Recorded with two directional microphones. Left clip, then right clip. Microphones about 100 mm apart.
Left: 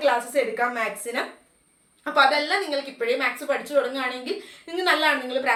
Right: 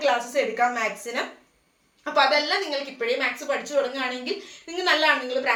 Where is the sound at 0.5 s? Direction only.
40° left (ahead or behind).